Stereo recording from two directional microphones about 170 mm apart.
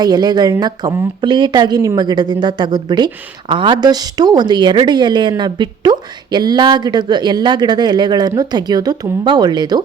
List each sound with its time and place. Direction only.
0.0 s a woman's voice: 25° right (ahead or behind)